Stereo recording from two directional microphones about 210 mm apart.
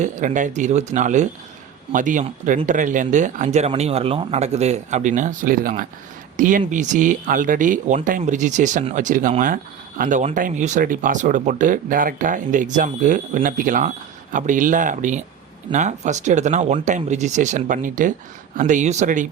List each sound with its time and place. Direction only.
0.0 s speech: 35° right (ahead or behind)